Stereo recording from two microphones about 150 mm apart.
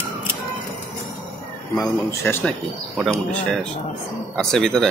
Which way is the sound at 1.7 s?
20° left (ahead or behind).